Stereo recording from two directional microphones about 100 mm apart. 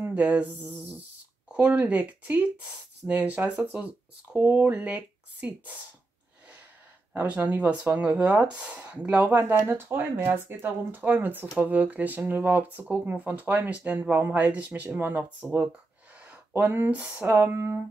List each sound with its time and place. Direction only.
0.0 s a sound: 15° right (ahead or behind)
1.5 s speech: 20° right (ahead or behind)
7.2 s speech: 15° right (ahead or behind)